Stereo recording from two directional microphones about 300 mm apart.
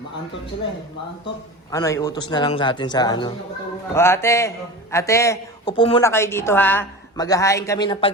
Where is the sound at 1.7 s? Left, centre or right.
Centre.